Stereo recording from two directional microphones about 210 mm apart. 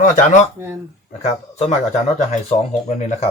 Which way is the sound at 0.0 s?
35° left (ahead or behind).